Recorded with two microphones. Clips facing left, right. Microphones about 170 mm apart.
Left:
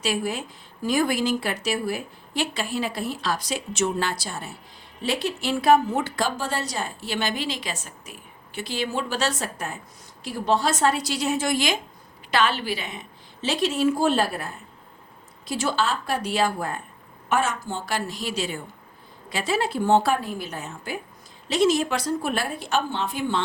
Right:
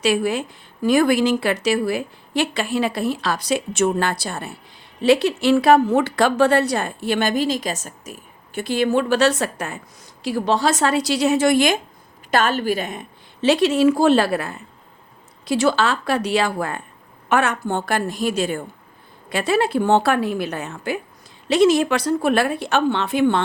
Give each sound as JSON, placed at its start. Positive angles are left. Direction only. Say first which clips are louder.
{"t": 0.0, "sound": "speech", "louder": "right 7 dB", "side_deg": -70}
{"t": 5.0, "sound": "a woman's voice", "louder": "right 10 dB", "side_deg": -70}
{"t": 10.2, "sound": "a woman's voice", "louder": "right 4 dB", "side_deg": -90}
{"t": 17.2, "sound": "a woman's voice", "louder": "right 5 dB", "side_deg": -65}